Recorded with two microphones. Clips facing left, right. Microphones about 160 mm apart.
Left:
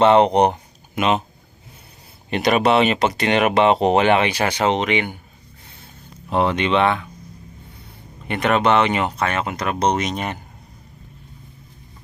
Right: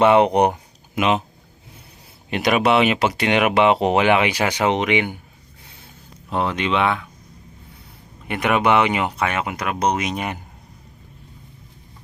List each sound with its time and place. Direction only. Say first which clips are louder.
0.0 s speech: left 1 dB; 10° right (ahead or behind)
2.3 s speech: left 1 dB; 10° right (ahead or behind)
6.3 s speech: left 3 dB; centre (ahead or behind)
8.3 s speech: left 1 dB; 10° right (ahead or behind)